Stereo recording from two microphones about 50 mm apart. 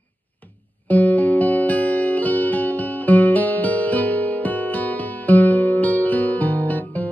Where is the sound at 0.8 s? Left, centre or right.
Left.